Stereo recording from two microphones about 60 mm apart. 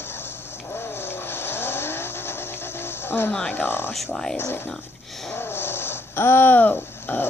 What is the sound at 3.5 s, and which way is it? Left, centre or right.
Speech, left.